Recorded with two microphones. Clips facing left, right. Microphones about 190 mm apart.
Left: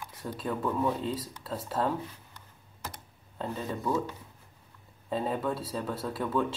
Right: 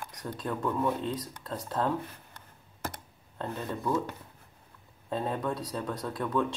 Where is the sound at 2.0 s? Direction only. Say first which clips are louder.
Even; 55° right (ahead or behind).